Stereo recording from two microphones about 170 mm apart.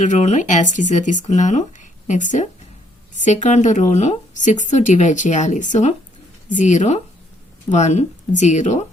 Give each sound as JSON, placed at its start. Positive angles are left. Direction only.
{"t": 0.0, "sound": "speech", "side_deg": 45}